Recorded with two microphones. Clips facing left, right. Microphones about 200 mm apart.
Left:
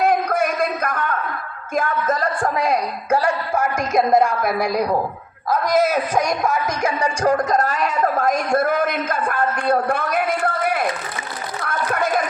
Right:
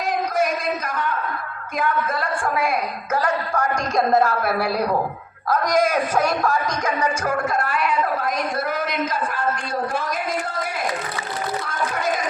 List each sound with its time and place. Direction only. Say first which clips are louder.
0.0 s a sound: left 4 dB; 55° left (ahead or behind)
1.7 s speech: left 2 dB; 45° left (ahead or behind)
3.8 s speech: left 3 dB; centre (ahead or behind)
5.7 s music: left 2 dB; 5° left (ahead or behind)
7.2 s speech: left 5 dB; 35° left (ahead or behind); by 10.8 s 60° left (ahead or behind)
11.6 s a sound: left 7 dB; 60° left (ahead or behind)